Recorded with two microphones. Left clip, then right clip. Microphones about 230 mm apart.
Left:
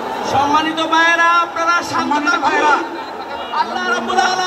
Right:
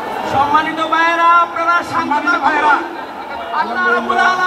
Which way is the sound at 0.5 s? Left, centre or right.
Left.